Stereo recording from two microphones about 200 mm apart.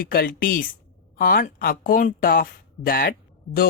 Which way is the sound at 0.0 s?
45° left (ahead or behind).